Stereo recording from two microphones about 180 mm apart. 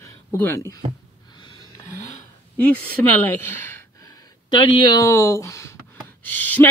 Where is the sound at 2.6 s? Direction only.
10° left (ahead or behind).